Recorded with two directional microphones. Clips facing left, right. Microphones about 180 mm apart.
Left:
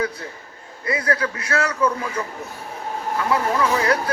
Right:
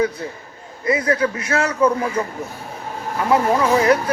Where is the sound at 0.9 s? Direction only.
25° right (ahead or behind).